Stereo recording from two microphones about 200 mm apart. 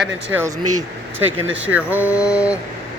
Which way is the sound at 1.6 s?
10° right (ahead or behind).